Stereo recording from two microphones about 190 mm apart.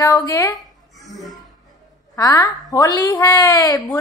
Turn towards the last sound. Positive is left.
turn(degrees=20)  # may be behind; listen again after turning